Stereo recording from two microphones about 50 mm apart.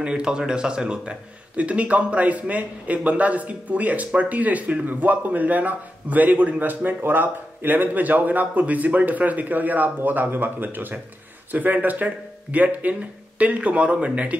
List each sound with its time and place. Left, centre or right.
0.0 s a man's voice: centre